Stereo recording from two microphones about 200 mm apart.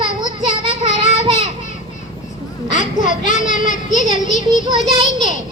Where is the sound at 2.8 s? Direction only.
40° left (ahead or behind).